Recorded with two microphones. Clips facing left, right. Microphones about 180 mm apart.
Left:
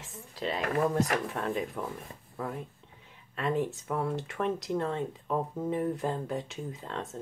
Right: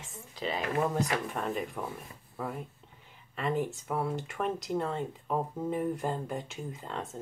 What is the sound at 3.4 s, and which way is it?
Speech, 5° right (ahead or behind).